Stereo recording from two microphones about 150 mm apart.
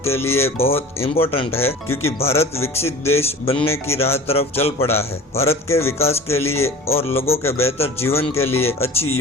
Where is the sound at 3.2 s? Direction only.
40° left (ahead or behind).